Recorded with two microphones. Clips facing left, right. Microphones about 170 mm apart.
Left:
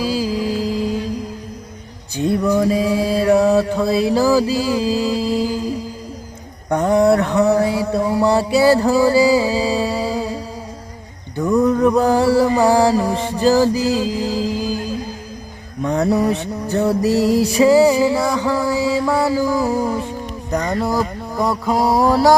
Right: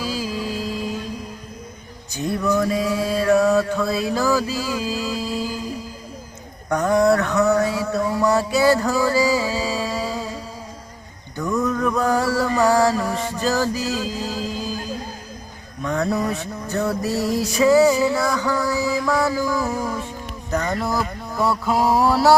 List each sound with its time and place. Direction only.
0.0 s music: 35° left (ahead or behind)
2.1 s mantra: 30° left (ahead or behind)
6.7 s mantra: 30° left (ahead or behind)
11.3 s mantra: 30° left (ahead or behind)
15.8 s music: 30° left (ahead or behind)
16.2 s mantra: 30° left (ahead or behind)
17.4 s music: 30° left (ahead or behind)
20.5 s a sound: 15° left (ahead or behind)